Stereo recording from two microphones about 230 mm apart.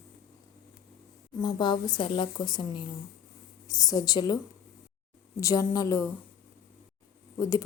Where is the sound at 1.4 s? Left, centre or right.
Centre.